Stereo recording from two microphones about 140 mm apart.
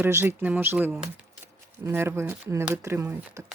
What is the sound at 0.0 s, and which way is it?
Speech, 15° right (ahead or behind).